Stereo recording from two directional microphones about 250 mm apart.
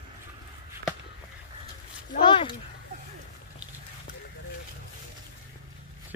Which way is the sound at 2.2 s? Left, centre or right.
Centre.